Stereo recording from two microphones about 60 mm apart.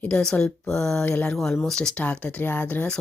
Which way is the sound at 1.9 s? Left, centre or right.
Left.